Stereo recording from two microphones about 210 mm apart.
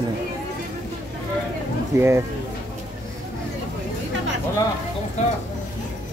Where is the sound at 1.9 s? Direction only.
10° right (ahead or behind).